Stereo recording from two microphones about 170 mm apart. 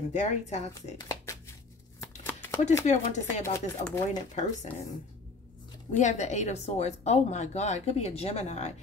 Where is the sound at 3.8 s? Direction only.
40° left (ahead or behind).